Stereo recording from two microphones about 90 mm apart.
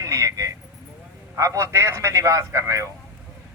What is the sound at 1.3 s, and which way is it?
Speech, 35° right (ahead or behind).